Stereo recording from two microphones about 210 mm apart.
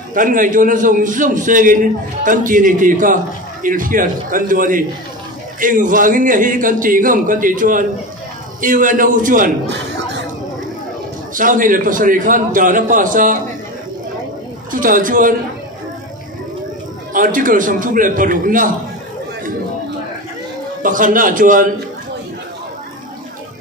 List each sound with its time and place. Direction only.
0.1 s a man's voice: 40° right (ahead or behind)
11.3 s a man's voice: 40° right (ahead or behind)
14.7 s a man's voice: 40° right (ahead or behind)
17.1 s a man's voice: 40° right (ahead or behind)
20.8 s a man's voice: 40° right (ahead or behind)